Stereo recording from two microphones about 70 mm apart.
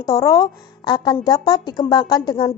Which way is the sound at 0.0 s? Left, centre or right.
Left.